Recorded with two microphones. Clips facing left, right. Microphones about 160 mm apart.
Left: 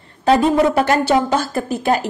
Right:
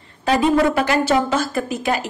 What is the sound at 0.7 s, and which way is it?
A woman's voice, 45° left (ahead or behind).